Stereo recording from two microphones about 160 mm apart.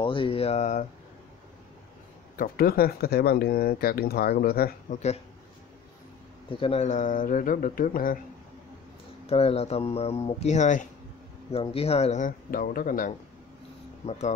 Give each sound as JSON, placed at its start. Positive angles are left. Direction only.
{"t": 0.0, "sound": "speech", "side_deg": 35}
{"t": 2.3, "sound": "speech", "side_deg": 65}
{"t": 6.5, "sound": "speech", "side_deg": 35}
{"t": 9.2, "sound": "speech", "side_deg": 40}
{"t": 11.5, "sound": "speech", "side_deg": 40}
{"t": 14.0, "sound": "speech", "side_deg": 45}